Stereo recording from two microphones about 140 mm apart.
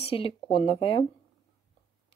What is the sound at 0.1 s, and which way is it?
Speech, 40° left (ahead or behind).